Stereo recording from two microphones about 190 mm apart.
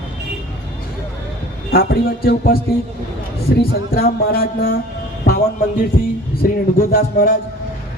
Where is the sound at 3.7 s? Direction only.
50° left (ahead or behind).